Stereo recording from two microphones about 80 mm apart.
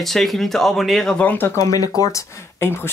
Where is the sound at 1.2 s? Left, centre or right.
Left.